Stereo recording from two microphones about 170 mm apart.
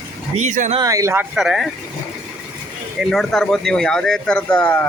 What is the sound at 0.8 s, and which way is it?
Speech, 20° right (ahead or behind).